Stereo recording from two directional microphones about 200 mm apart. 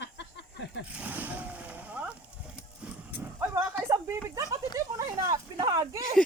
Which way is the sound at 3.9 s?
15° right (ahead or behind).